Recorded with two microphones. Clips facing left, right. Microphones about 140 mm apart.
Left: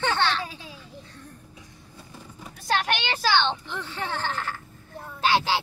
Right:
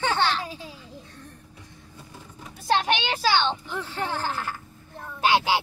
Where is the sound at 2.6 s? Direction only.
25° right (ahead or behind).